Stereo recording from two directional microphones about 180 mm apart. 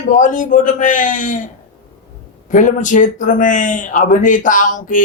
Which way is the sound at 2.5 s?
45° left (ahead or behind).